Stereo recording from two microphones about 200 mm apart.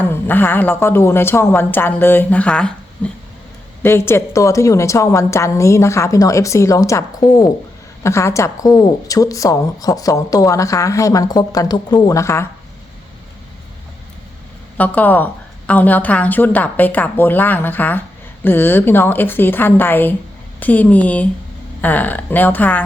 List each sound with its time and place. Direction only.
0.0 s a woman's voice: 10° left (ahead or behind)
14.8 s a woman's voice: 10° left (ahead or behind)